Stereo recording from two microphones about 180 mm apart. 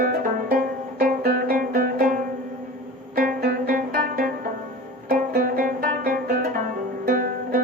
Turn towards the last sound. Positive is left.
turn(degrees=-55)  # may be behind; listen again after turning